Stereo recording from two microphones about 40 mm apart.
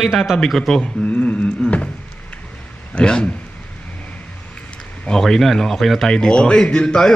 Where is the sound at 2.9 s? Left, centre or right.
Left.